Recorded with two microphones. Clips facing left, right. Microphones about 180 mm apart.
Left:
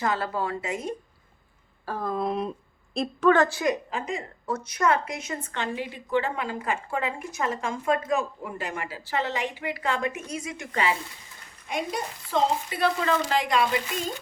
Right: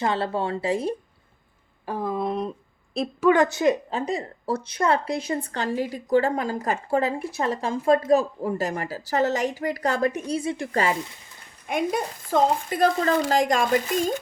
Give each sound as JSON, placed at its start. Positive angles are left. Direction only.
{"t": 0.0, "sound": "speech", "side_deg": -25}
{"t": 1.9, "sound": "speech", "side_deg": -15}
{"t": 2.1, "sound": "speech", "side_deg": 0}
{"t": 3.2, "sound": "a woman's voice", "side_deg": -15}
{"t": 11.7, "sound": "speech", "side_deg": -50}